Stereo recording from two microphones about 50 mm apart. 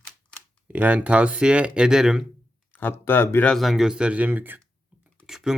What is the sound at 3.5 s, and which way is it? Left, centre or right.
Speech, centre.